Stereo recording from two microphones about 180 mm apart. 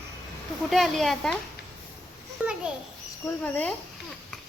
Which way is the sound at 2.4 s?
10° right (ahead or behind).